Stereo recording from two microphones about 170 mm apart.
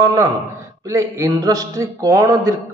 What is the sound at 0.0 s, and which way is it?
A man's voice, 20° right (ahead or behind).